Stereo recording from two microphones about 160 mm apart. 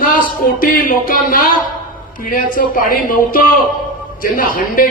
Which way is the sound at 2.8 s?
65° left (ahead or behind).